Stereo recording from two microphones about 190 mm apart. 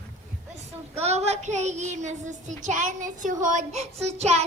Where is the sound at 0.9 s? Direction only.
35° right (ahead or behind).